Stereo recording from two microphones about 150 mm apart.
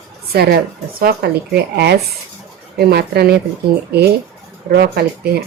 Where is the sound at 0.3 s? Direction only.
90° right.